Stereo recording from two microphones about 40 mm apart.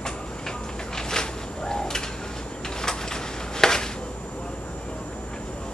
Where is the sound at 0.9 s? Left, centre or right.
Centre.